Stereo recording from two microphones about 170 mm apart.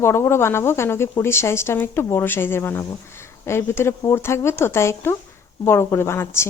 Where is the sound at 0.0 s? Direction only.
15° left (ahead or behind).